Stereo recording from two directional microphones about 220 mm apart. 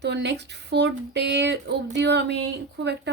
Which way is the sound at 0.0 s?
50° right (ahead or behind).